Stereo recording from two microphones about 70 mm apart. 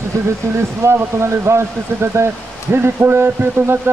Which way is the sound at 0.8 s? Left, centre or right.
Right.